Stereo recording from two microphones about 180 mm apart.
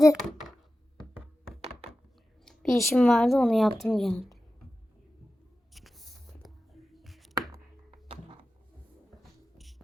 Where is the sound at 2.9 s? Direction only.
5° left (ahead or behind).